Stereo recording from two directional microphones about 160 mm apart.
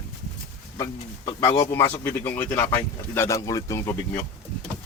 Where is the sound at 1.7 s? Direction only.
15° left (ahead or behind).